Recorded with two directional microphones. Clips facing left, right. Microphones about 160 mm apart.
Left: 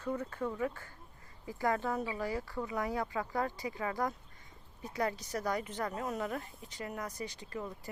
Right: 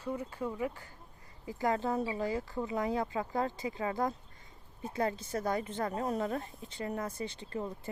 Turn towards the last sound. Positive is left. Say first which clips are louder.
# right 3 dB
turn(degrees=-30)  # may be behind; listen again after turning